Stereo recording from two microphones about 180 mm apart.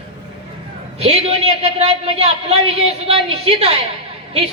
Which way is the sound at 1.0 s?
35° right (ahead or behind).